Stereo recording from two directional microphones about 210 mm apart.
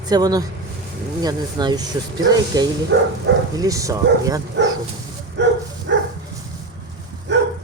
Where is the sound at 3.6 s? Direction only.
15° right (ahead or behind).